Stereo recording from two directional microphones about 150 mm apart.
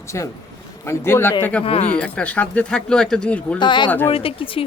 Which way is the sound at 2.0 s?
10° left (ahead or behind).